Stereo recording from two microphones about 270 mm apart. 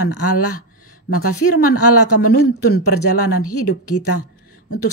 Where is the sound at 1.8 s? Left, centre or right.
Left.